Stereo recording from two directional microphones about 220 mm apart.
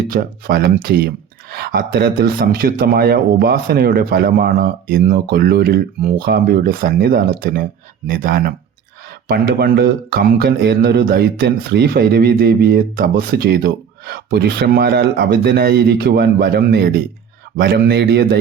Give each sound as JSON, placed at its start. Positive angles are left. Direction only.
{"t": 0.1, "sound": "speech", "side_deg": -45}